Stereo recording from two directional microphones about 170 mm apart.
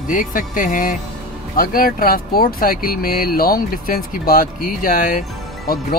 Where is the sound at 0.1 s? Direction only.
50° left (ahead or behind).